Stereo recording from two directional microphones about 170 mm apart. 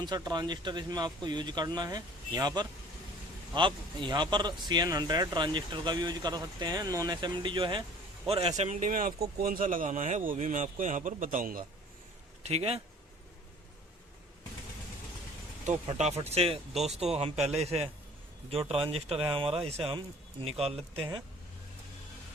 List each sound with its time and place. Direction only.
0.0 s speech: 25° right (ahead or behind)
3.5 s speech: 25° right (ahead or behind); by 11.6 s 50° right (ahead or behind)
12.4 s speech: 40° right (ahead or behind)
15.6 s speech: 45° right (ahead or behind)